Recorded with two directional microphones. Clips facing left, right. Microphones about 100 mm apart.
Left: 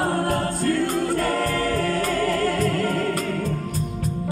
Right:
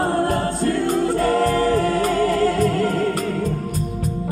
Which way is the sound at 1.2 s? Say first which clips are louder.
Right 5 dB; 10° right (ahead or behind).